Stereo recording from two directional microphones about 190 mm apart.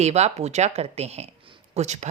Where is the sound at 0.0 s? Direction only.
35° right (ahead or behind).